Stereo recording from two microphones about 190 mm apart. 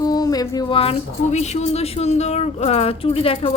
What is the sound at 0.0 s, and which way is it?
Speech, 20° left (ahead or behind).